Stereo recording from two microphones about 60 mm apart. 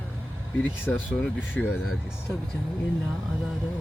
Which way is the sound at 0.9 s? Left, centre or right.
Left.